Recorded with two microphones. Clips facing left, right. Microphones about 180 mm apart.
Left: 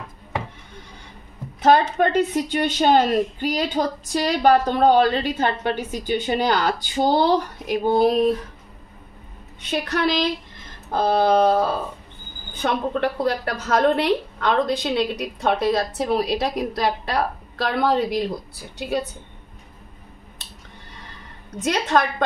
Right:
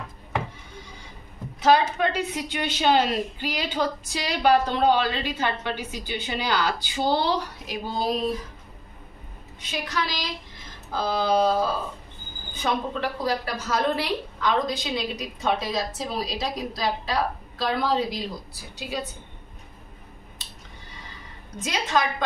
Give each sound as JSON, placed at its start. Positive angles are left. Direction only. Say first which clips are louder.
{"t": 1.6, "sound": "a woman's voice", "louder": "left 3 dB", "side_deg": 50}
{"t": 9.6, "sound": "a woman's voice", "louder": "left 6 dB", "side_deg": 60}
{"t": 20.4, "sound": "a sound", "louder": "left 2 dB", "side_deg": 60}
{"t": 21.5, "sound": "a woman's voice", "louder": "left 5 dB", "side_deg": 65}